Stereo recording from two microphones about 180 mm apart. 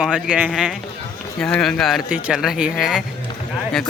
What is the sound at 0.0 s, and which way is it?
Speech, 5° right (ahead or behind).